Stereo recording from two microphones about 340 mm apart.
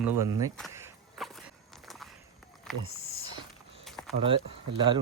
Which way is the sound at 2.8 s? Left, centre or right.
Right.